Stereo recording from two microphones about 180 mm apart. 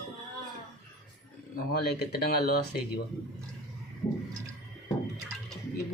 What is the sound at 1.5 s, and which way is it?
Speech, 60° left (ahead or behind).